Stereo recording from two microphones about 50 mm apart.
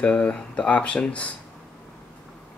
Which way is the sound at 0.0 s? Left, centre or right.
Left.